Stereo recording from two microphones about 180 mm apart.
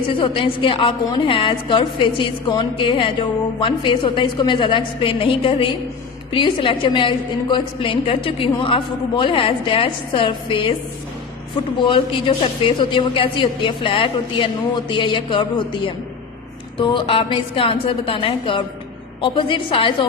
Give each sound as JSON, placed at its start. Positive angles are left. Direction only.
{"t": 0.1, "sound": "a woman's voice", "side_deg": 30}
{"t": 11.8, "sound": "a woman's voice", "side_deg": 30}